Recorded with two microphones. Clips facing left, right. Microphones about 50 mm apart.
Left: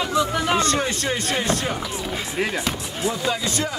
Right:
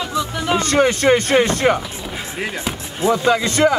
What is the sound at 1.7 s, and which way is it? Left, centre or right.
Speech, right.